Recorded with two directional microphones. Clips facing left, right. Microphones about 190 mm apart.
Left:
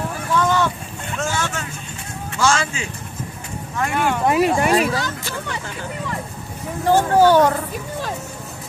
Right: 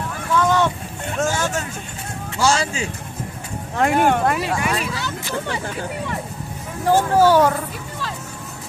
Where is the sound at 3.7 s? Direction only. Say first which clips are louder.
Right 4 dB; 50° right (ahead or behind).